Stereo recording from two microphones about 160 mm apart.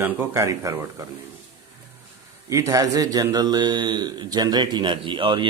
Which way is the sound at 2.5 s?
20° right (ahead or behind).